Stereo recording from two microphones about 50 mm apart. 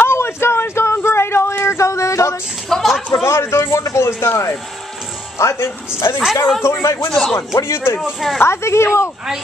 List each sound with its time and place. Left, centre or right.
0.0 s a sound: left
1.6 s a sound: left
2.7 s a sound: centre
3.3 s a man's voice: left
6.6 s speech: left
7.1 s speech: centre
7.3 s a man's voice: left
8.0 s speech: centre
8.4 s a man's voice: left